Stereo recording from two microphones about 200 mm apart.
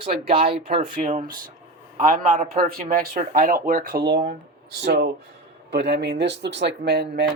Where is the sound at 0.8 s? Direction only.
40° right (ahead or behind).